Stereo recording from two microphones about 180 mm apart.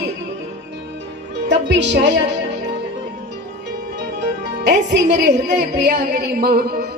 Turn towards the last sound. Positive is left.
turn(degrees=-60)  # may be behind; listen again after turning